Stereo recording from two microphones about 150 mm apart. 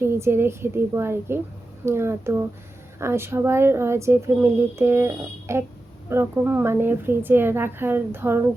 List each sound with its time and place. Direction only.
0.0 s speech: 15° right (ahead or behind)